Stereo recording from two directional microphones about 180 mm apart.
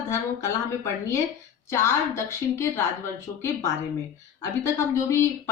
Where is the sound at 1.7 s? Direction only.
15° left (ahead or behind).